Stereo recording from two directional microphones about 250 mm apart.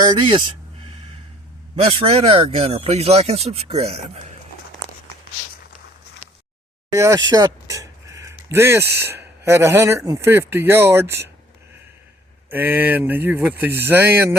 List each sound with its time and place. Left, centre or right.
0.0 s speech: centre
0.9 s a sound: right
1.7 s speech: right
6.9 s a sound: centre
8.5 s speech: centre
12.5 s speech: centre